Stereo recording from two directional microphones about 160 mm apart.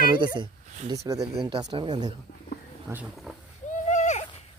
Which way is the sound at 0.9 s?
20° right (ahead or behind).